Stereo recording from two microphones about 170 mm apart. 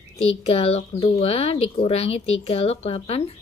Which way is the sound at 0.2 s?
35° left (ahead or behind).